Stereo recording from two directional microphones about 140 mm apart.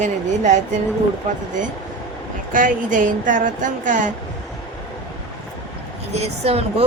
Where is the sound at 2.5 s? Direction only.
75° right (ahead or behind).